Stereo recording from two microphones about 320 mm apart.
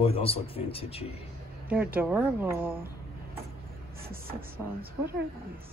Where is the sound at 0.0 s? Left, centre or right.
Centre.